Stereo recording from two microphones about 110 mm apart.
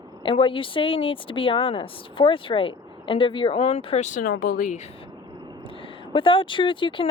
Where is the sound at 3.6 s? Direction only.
70° left (ahead or behind).